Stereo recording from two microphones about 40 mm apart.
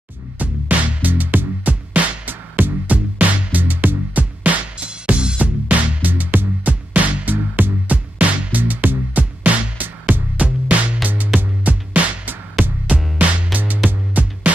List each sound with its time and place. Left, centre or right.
0.4 s music: right
2.9 s music: right
13.6 s music: right